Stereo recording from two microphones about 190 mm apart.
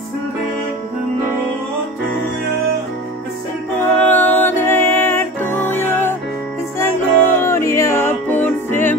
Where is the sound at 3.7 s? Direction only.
10° left (ahead or behind).